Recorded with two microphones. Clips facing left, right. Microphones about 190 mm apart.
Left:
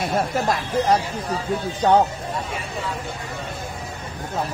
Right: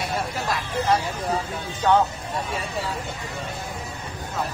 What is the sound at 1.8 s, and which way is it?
Speech, 35° left (ahead or behind).